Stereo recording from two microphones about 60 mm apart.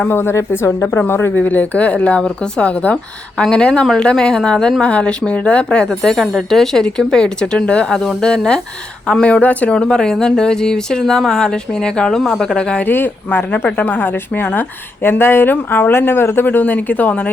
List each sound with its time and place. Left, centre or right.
0.1 s speech: left
1.4 s speech: left
12.8 s a woman's voice: left